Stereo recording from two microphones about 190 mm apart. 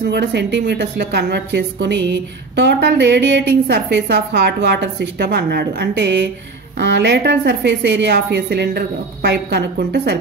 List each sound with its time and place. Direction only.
0.1 s a woman's voice: 60° right (ahead or behind)